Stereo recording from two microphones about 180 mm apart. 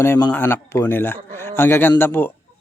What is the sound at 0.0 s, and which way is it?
A man's voice, 15° left (ahead or behind).